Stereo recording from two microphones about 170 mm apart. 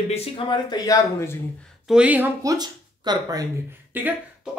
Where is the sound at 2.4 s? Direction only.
25° right (ahead or behind).